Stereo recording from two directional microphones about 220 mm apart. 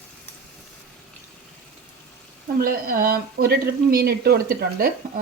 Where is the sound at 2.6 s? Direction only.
40° right (ahead or behind).